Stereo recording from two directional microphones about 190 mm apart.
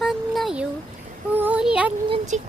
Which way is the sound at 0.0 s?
Centre (ahead or behind).